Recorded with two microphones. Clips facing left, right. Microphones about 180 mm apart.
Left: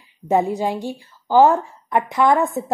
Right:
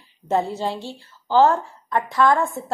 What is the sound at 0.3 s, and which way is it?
A woman's voice, 15° left (ahead or behind).